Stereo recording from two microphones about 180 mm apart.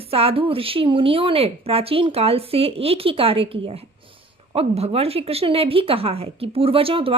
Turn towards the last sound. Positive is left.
turn(degrees=-30)  # may be behind; listen again after turning